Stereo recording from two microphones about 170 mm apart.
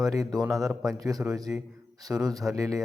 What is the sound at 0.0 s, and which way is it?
A man's voice, 20° right (ahead or behind).